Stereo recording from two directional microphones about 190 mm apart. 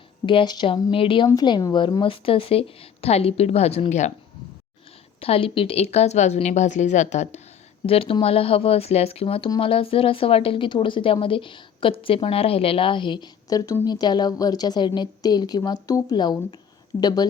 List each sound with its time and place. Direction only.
0.3 s speech: 25° left (ahead or behind)
5.2 s a woman's voice: 30° left (ahead or behind)